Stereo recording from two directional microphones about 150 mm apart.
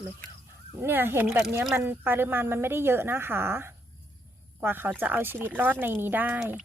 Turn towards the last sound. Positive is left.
turn(degrees=-10)  # may be behind; listen again after turning